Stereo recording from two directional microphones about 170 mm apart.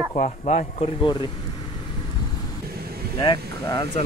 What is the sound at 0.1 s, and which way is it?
Speech, 45° left (ahead or behind).